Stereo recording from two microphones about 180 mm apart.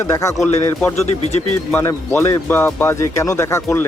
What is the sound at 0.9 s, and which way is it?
Speech, 35° left (ahead or behind).